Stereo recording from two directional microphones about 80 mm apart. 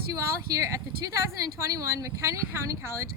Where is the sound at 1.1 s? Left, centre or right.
Right.